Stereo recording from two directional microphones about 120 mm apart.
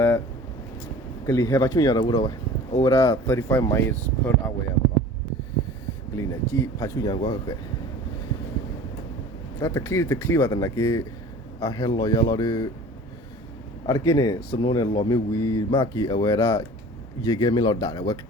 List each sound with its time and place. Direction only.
1.3 s speech: 30° left (ahead or behind)
6.1 s speech: 25° left (ahead or behind)
9.6 s speech: 25° left (ahead or behind)
13.8 s speech: 25° left (ahead or behind)